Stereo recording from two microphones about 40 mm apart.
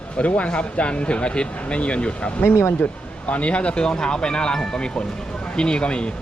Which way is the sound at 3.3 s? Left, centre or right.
Left.